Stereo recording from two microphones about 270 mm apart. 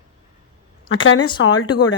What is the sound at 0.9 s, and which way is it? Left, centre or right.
Speech, left.